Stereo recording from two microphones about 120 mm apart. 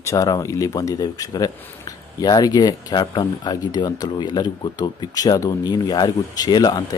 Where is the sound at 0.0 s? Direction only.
25° left (ahead or behind).